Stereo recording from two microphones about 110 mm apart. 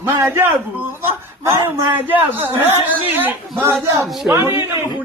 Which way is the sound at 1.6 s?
15° right (ahead or behind).